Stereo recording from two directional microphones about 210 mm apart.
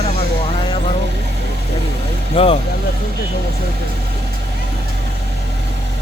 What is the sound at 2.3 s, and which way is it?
Vehicle, 30° left (ahead or behind).